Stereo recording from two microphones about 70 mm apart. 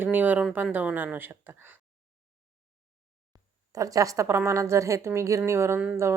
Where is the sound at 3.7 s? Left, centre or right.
Right.